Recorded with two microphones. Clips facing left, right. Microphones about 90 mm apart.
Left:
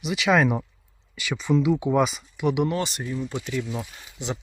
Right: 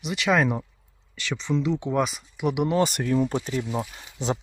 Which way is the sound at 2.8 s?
50° right (ahead or behind).